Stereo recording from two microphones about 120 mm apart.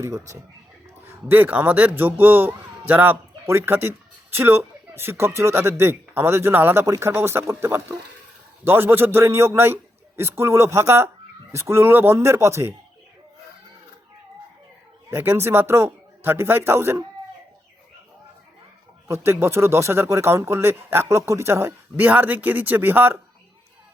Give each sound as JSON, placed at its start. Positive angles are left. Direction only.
{"t": 0.0, "sound": "speech", "side_deg": -25}
{"t": 1.3, "sound": "a man's voice", "side_deg": -15}
{"t": 15.1, "sound": "speech", "side_deg": -20}
{"t": 19.0, "sound": "speech", "side_deg": -25}